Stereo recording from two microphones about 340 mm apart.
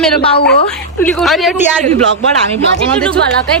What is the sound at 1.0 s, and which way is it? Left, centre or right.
Speech, centre.